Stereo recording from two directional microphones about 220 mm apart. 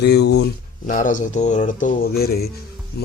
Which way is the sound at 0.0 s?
50° left (ahead or behind).